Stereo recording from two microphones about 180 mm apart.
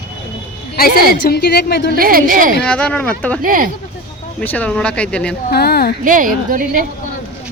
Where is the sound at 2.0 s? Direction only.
55° right (ahead or behind).